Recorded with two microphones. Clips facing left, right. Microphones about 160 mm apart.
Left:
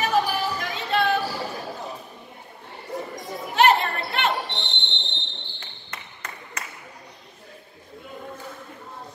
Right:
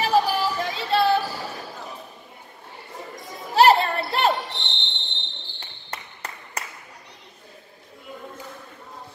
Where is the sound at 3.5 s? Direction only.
35° right (ahead or behind).